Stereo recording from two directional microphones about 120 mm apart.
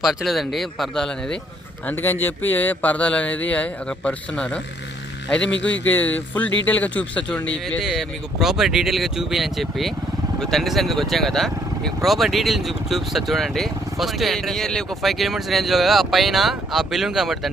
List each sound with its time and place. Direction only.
0.0 s speech: centre (ahead or behind)
1.9 s speech: 15° left (ahead or behind)
5.9 s speech: 15° left (ahead or behind)
7.9 s speech: centre (ahead or behind)